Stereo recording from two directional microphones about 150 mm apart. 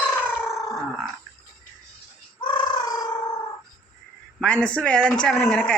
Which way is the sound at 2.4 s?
30° left (ahead or behind).